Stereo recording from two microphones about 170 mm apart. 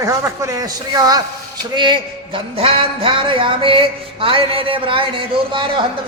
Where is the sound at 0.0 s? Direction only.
15° right (ahead or behind).